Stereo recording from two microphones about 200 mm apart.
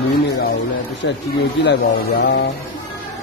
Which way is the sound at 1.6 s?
60° left (ahead or behind).